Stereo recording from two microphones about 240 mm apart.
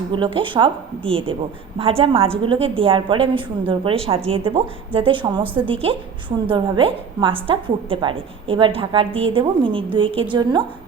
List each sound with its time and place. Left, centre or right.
0.1 s a woman's voice: right